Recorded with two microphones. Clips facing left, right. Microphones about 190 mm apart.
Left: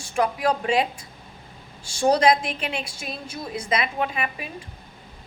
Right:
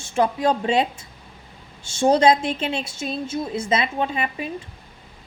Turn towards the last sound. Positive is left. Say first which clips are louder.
# right 2 dB
turn(degrees=-30)  # may be behind; listen again after turning